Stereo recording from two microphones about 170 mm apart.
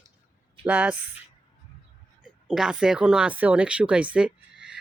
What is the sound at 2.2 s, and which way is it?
Speech, 5° right (ahead or behind).